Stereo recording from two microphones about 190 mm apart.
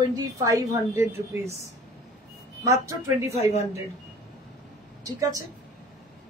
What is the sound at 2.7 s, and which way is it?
Speech, 15° right (ahead or behind).